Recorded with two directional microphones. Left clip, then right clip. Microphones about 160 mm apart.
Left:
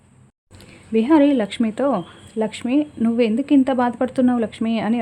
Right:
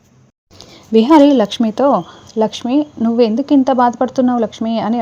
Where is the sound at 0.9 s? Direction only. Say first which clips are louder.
Right 7 dB; 25° right (ahead or behind).